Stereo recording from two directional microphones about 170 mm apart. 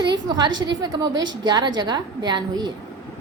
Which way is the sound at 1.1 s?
90° right.